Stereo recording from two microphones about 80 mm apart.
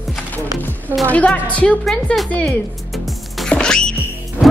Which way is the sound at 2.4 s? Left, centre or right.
Centre.